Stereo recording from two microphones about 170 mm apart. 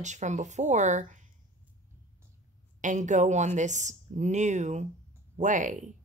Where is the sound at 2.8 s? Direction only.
45° right (ahead or behind).